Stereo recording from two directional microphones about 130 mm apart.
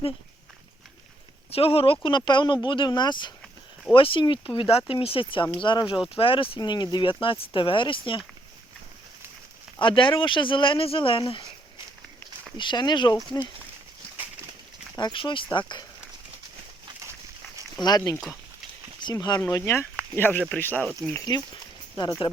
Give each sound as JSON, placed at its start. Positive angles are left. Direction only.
{"t": 1.5, "sound": "speech", "side_deg": 50}
{"t": 6.6, "sound": "speech", "side_deg": 35}
{"t": 9.8, "sound": "speech", "side_deg": 40}
{"t": 12.5, "sound": "speech", "side_deg": 35}
{"t": 14.9, "sound": "speech", "side_deg": 35}
{"t": 17.7, "sound": "speech", "side_deg": 30}
{"t": 19.1, "sound": "speech", "side_deg": 30}
{"t": 21.1, "sound": "speech", "side_deg": 30}